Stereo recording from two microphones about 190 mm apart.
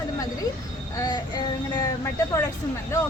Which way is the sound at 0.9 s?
20° left (ahead or behind).